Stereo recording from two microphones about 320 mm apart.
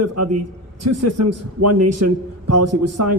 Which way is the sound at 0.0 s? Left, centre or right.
Right.